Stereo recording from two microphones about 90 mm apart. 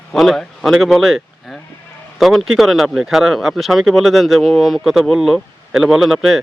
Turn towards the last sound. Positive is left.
turn(degrees=0)  # may be behind; listen again after turning